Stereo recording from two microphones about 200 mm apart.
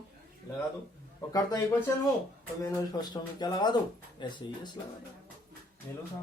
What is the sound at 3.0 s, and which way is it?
Speech, 20° left (ahead or behind).